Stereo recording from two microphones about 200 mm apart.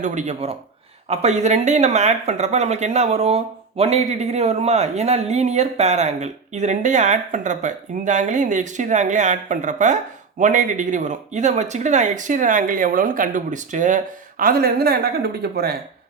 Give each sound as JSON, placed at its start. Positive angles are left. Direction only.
{"t": 0.0, "sound": "speech", "side_deg": -35}